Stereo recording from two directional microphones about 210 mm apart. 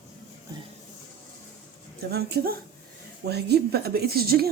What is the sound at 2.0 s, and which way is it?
A woman's voice, 50° right (ahead or behind).